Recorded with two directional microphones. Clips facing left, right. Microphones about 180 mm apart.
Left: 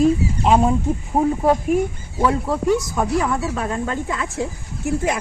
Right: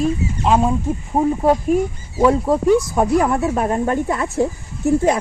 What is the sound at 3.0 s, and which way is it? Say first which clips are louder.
Speech: right 4 dB; 30° right (ahead or behind).